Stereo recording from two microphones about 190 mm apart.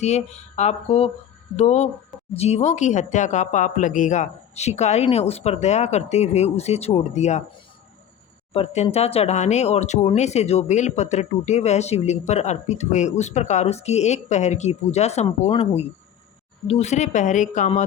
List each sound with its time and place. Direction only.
0.0 s speech: 35° left (ahead or behind)
8.5 s speech: 35° left (ahead or behind)